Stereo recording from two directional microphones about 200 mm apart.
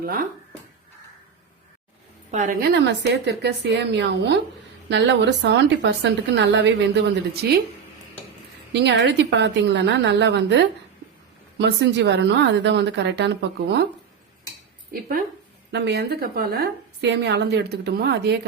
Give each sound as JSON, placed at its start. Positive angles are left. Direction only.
{"t": 0.0, "sound": "speech", "side_deg": -45}
{"t": 2.3, "sound": "a woman's voice", "side_deg": -40}
{"t": 8.7, "sound": "a woman's voice", "side_deg": -60}
{"t": 14.9, "sound": "speech", "side_deg": -45}
{"t": 15.7, "sound": "a woman's voice", "side_deg": -60}